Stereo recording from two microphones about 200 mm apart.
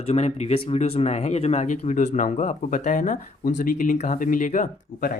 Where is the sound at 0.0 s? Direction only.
30° left (ahead or behind).